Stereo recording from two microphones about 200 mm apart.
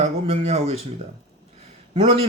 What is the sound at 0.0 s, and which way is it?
Speech, 30° right (ahead or behind).